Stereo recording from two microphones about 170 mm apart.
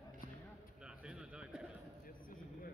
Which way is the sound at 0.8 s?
5° right (ahead or behind).